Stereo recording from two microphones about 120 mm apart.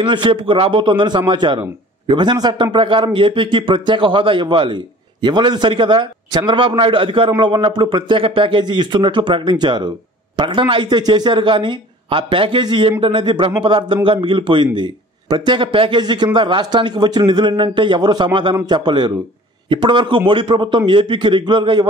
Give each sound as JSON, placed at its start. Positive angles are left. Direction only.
{"t": 0.0, "sound": "a man's voice", "side_deg": -40}